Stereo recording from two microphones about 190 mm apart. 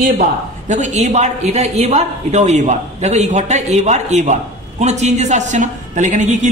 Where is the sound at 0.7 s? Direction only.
40° right (ahead or behind).